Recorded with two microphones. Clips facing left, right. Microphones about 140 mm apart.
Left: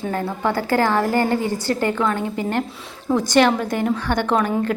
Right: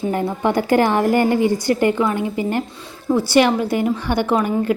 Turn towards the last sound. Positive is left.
turn(degrees=-10)  # may be behind; listen again after turning